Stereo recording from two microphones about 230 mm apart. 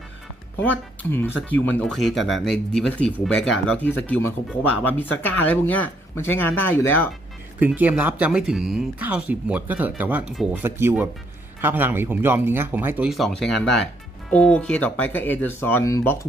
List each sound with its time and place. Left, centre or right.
0.6 s speech: centre
7.6 s speech: centre